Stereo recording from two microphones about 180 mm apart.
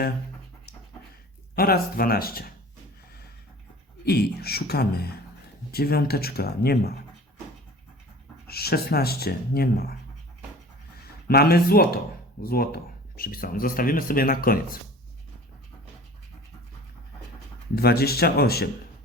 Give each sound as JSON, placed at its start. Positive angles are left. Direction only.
{"t": 1.5, "sound": "speech", "side_deg": 55}
{"t": 4.0, "sound": "speech", "side_deg": 60}
{"t": 8.4, "sound": "speech", "side_deg": 60}
{"t": 11.3, "sound": "speech", "side_deg": 60}
{"t": 17.7, "sound": "speech", "side_deg": 60}